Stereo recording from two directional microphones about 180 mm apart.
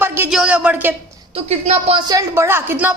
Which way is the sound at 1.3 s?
35° right (ahead or behind).